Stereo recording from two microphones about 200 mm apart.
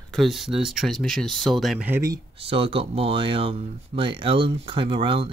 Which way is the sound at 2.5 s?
30° right (ahead or behind).